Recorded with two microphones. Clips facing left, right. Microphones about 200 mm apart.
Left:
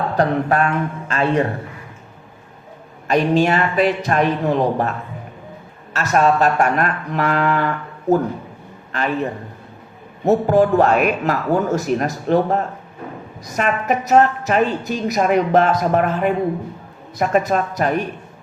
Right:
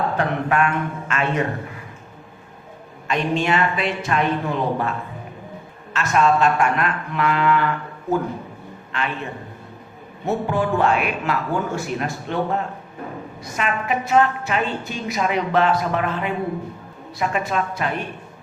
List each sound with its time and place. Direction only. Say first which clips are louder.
0.2 s a man's voice: left 6 dB; 35° left (ahead or behind)
3.1 s a man's voice: left 5 dB; 40° left (ahead or behind)
8.9 s a man's voice: left 6 dB; 40° left (ahead or behind)